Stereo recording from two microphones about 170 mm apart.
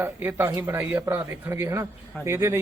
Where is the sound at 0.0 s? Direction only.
15° right (ahead or behind).